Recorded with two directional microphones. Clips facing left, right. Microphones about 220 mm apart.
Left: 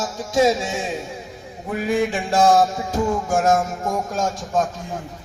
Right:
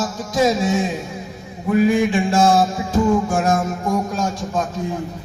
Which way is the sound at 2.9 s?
45° left (ahead or behind).